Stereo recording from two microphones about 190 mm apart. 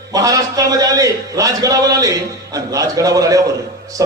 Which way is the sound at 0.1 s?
20° right (ahead or behind).